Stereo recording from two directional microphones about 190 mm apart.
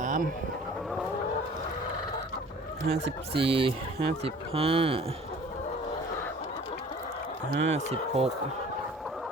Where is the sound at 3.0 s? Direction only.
30° right (ahead or behind).